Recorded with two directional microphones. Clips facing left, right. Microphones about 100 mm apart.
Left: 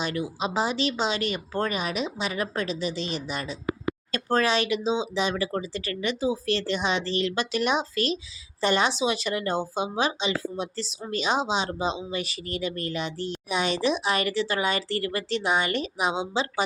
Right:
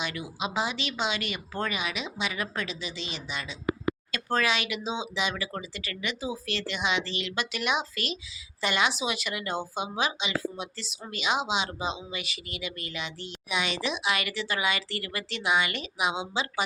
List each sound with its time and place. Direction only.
0.0 s speech: 35° left (ahead or behind)